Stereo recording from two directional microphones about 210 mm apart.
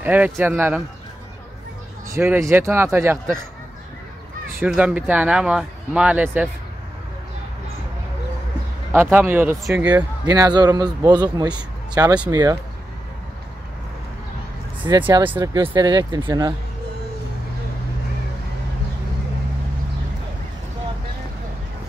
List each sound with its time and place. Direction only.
0.0 s speech: 10° right (ahead or behind)
2.1 s speech: 10° right (ahead or behind)
4.6 s speech: 5° right (ahead or behind)
8.9 s speech: 10° right (ahead or behind)
10.2 s speech: 20° right (ahead or behind)
14.9 s speech: 20° right (ahead or behind)
15.2 s speech: 10° right (ahead or behind)
15.5 s speech: 20° right (ahead or behind)